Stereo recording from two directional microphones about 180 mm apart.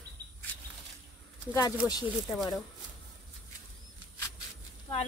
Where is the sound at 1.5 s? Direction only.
20° left (ahead or behind).